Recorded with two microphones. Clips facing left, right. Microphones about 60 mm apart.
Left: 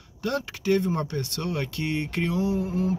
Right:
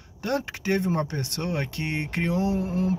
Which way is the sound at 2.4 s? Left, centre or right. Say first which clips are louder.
Even; right.